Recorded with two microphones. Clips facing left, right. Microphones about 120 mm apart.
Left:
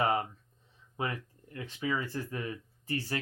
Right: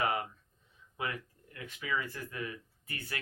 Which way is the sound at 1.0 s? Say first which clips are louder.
Left 3 dB; 35° left (ahead or behind).